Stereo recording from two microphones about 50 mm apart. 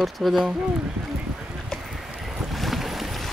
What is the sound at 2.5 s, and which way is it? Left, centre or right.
Boat, centre.